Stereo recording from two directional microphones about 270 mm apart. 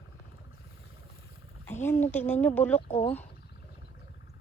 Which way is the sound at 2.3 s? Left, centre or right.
Centre.